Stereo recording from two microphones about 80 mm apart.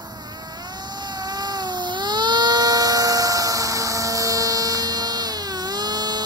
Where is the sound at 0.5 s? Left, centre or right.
Right.